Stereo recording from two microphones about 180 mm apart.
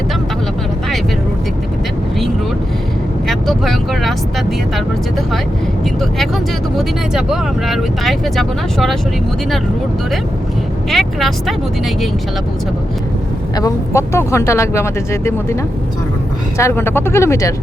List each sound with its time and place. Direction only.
3.2 s vehicle: centre (ahead or behind)
5.8 s speech: centre (ahead or behind)
10.8 s speech: centre (ahead or behind)
13.6 s speech: 20° left (ahead or behind)
16.6 s speech: 15° left (ahead or behind)